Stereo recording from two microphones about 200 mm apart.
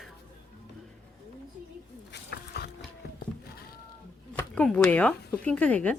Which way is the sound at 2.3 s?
55° left (ahead or behind).